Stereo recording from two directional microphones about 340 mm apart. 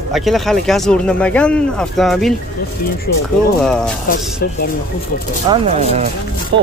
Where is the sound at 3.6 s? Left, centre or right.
Centre.